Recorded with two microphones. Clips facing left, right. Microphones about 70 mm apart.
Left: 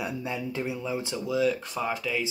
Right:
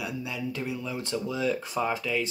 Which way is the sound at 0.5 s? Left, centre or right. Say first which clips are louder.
Left 2 dB; centre.